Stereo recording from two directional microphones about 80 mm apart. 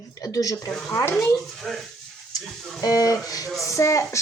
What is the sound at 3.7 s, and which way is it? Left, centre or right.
Speech, left.